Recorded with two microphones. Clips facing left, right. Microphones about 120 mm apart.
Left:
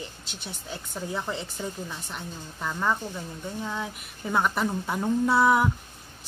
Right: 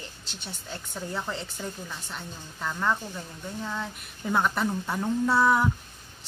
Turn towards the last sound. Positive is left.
turn(degrees=10)  # may be behind; listen again after turning